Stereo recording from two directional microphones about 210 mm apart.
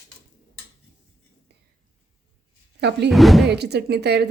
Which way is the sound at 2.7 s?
55° right (ahead or behind).